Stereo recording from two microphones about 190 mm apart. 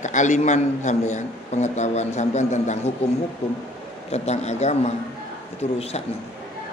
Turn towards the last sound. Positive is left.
turn(degrees=35)  # may be behind; listen again after turning